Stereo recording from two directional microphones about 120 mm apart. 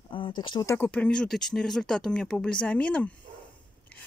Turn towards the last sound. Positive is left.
turn(degrees=10)  # may be behind; listen again after turning